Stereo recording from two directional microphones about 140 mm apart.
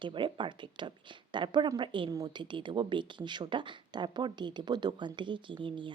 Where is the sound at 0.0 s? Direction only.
35° right (ahead or behind).